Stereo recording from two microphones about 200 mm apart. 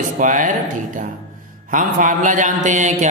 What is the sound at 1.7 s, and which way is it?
Speech, 40° right (ahead or behind).